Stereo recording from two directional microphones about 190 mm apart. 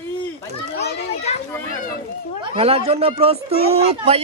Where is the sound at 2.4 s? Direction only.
30° right (ahead or behind).